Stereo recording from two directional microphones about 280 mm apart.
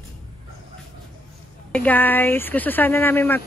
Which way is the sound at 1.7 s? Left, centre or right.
Centre.